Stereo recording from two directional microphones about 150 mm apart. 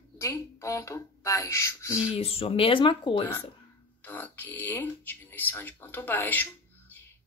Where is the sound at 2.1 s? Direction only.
40° left (ahead or behind).